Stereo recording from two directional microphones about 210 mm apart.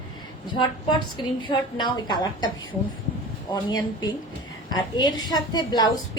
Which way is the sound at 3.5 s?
20° left (ahead or behind).